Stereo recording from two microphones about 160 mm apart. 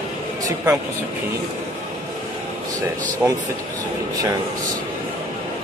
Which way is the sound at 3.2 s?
20° right (ahead or behind).